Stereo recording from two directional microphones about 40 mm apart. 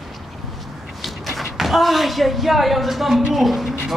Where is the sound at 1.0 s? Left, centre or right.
Centre.